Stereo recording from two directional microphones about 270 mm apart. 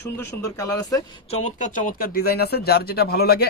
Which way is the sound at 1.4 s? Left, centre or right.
Left.